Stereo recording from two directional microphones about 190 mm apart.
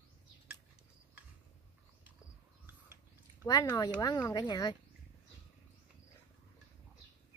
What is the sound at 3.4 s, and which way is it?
Speech, 20° left (ahead or behind).